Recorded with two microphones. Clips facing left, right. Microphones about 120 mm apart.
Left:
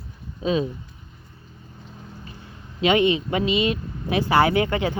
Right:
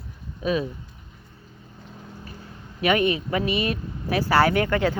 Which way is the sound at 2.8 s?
20° left (ahead or behind).